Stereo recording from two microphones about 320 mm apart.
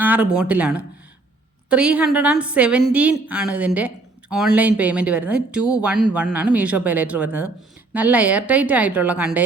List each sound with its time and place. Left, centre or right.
0.0 s a woman's voice: centre